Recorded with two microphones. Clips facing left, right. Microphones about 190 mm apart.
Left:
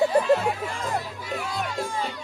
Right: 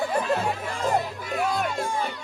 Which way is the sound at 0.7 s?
35° right (ahead or behind).